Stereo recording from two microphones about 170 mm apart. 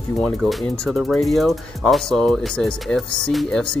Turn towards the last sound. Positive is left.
turn(degrees=0)  # may be behind; listen again after turning